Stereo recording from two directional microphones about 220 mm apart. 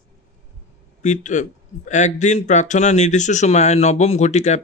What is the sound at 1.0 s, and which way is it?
A man's voice, 35° left (ahead or behind).